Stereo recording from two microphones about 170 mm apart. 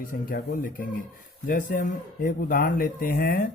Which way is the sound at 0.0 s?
55° left (ahead or behind).